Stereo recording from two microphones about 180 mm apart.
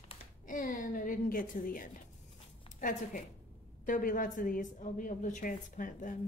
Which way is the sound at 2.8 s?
45° left (ahead or behind).